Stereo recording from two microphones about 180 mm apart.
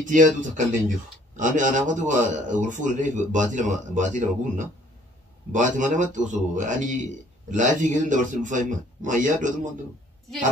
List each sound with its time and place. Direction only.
0.0 s speech: 45° right (ahead or behind)